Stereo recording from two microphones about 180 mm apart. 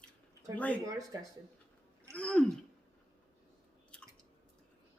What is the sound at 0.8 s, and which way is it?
Speech, 20° right (ahead or behind).